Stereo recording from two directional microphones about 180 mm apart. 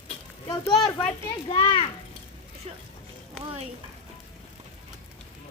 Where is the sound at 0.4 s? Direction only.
25° left (ahead or behind).